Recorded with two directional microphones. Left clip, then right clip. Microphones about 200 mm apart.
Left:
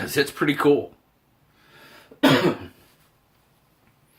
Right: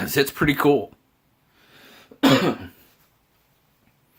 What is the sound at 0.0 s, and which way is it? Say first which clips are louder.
Speech: right 2 dB; 55° right (ahead or behind).